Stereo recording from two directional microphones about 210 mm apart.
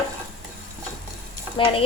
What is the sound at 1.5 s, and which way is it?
Speech, 25° left (ahead or behind).